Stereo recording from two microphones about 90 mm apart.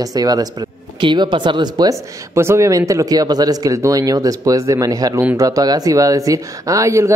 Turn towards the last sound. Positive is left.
turn(degrees=-35)  # may be behind; listen again after turning